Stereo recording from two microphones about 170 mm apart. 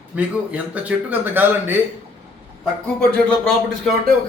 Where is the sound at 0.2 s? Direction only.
10° right (ahead or behind).